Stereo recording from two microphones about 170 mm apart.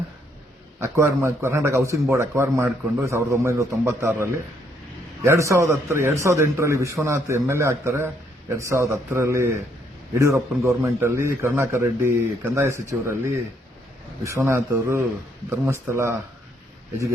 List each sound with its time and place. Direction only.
0.8 s a man's voice: 15° right (ahead or behind)